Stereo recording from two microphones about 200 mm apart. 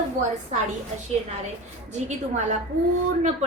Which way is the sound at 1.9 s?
35° right (ahead or behind).